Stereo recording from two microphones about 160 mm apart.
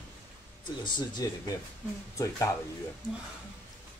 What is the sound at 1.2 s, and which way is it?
Speech, 20° left (ahead or behind).